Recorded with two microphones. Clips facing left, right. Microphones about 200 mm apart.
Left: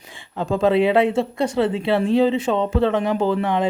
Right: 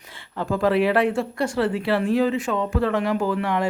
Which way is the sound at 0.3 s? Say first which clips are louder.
Left 3 dB; 20° left (ahead or behind).